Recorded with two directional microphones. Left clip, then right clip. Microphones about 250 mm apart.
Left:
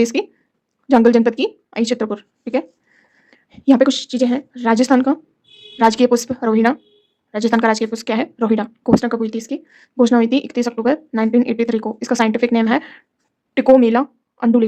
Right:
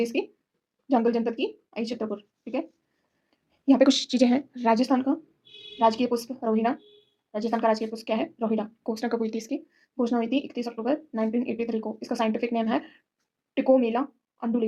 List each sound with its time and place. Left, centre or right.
0.0 s speech: left
3.2 s a sound: left
3.8 s speech: centre
4.7 s a woman's voice: left